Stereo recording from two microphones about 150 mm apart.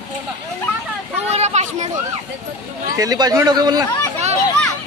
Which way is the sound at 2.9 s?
25° right (ahead or behind).